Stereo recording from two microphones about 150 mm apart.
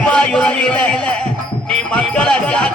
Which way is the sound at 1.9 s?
5° left (ahead or behind).